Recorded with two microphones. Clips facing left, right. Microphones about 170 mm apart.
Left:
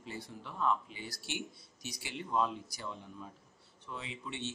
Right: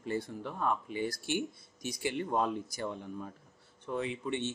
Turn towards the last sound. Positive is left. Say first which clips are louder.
# right 8 dB
turn(degrees=-55)  # may be behind; listen again after turning